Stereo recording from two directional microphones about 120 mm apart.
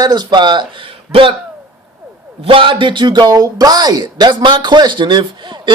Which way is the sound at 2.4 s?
45° right (ahead or behind).